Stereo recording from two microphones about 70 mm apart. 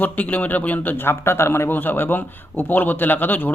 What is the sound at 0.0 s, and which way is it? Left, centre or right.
A man's voice, left.